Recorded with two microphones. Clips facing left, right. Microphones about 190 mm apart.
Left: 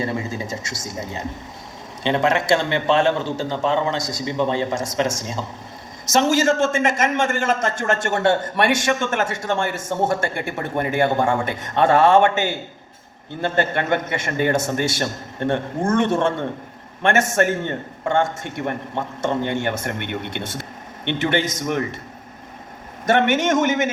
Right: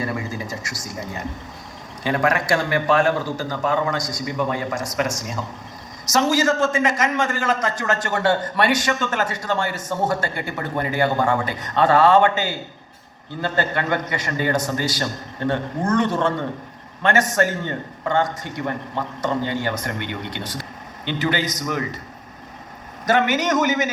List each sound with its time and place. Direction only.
0.0 s a sound: 25° left (ahead or behind)
2.0 s a man's voice: 25° left (ahead or behind)
23.0 s a man's voice: 25° left (ahead or behind)